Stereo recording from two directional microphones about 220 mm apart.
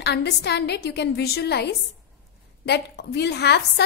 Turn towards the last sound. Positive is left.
turn(degrees=50)  # may be behind; listen again after turning